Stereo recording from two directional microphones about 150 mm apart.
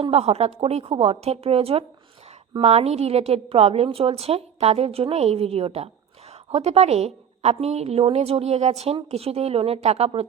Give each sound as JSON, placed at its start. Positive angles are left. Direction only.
{"t": 0.0, "sound": "a woman's voice", "side_deg": -45}